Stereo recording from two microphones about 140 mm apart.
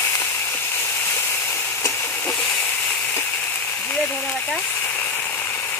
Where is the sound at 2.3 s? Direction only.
5° left (ahead or behind).